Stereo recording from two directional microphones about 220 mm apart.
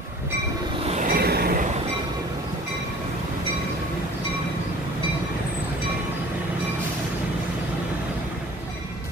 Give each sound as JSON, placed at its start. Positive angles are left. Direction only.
{"t": 0.8, "sound": "train", "side_deg": -35}